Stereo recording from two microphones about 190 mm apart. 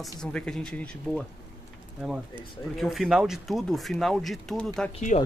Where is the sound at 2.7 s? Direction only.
Centre (ahead or behind).